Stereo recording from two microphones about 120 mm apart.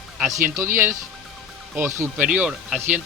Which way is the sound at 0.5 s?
20° right (ahead or behind).